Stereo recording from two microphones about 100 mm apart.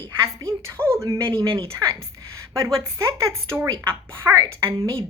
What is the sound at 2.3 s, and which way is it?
Speech, 30° right (ahead or behind).